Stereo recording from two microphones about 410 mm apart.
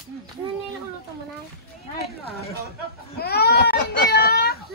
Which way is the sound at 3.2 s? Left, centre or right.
Left.